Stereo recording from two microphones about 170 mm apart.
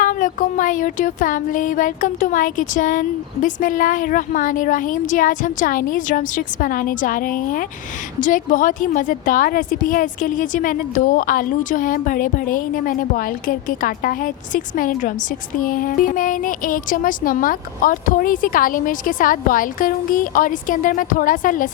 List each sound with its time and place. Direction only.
0.0 s music: 50° left (ahead or behind)